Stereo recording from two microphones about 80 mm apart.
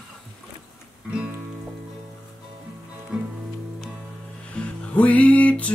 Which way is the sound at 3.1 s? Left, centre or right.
Centre.